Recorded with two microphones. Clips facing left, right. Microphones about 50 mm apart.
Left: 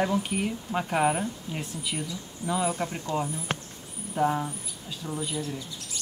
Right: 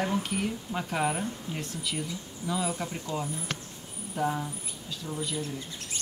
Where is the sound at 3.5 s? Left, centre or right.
Left.